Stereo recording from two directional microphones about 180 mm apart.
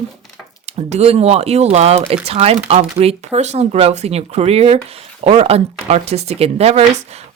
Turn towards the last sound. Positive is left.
turn(degrees=-35)  # may be behind; listen again after turning